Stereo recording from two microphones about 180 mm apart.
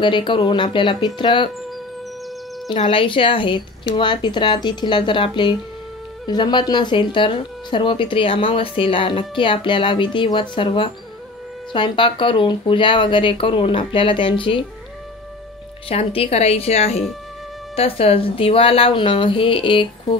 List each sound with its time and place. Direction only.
0.0 s speech: 25° left (ahead or behind)
2.7 s speech: 30° left (ahead or behind)
15.9 s speech: 35° left (ahead or behind)